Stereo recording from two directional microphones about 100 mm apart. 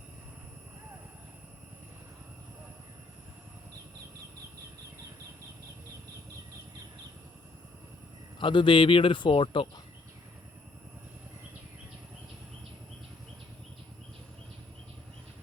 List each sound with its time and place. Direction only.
8.4 s speech: 55° left (ahead or behind)